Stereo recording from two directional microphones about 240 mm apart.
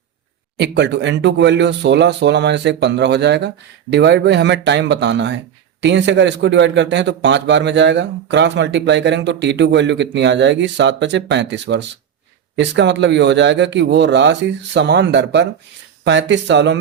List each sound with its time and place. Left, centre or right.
0.5 s a man's voice: right